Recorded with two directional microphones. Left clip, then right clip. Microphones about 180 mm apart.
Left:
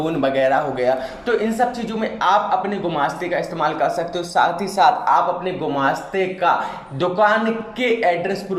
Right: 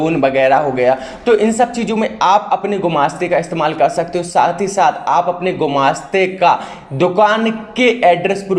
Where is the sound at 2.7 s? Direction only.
50° right (ahead or behind).